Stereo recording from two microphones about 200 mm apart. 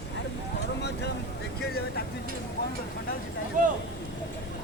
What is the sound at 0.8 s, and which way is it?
Vehicle, 55° left (ahead or behind).